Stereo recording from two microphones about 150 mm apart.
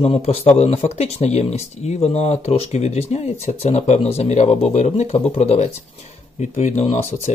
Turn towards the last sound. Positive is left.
turn(degrees=45)  # may be behind; listen again after turning